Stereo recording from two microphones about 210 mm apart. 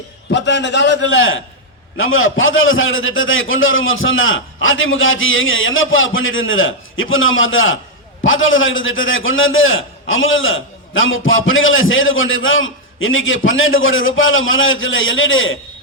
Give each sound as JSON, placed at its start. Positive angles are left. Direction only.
{"t": 0.3, "sound": "a man's voice", "side_deg": 60}